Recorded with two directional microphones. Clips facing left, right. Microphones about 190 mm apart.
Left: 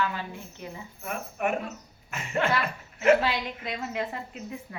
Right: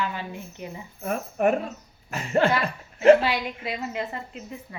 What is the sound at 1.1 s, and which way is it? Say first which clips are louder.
Speech: right 7 dB; 35° right (ahead or behind).